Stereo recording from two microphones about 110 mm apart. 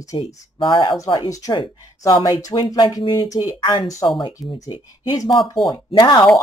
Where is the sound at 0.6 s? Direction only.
50° left (ahead or behind).